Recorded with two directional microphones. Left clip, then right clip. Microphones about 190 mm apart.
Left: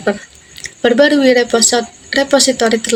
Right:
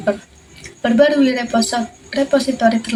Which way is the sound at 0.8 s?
45° left (ahead or behind).